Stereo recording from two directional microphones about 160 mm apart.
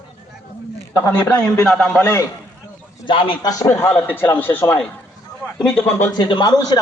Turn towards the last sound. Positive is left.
turn(degrees=25)  # may be behind; listen again after turning